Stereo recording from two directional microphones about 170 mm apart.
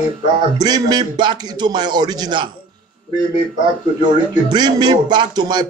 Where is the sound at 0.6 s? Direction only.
25° right (ahead or behind).